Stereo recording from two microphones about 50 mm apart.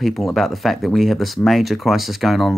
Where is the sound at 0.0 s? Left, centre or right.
Centre.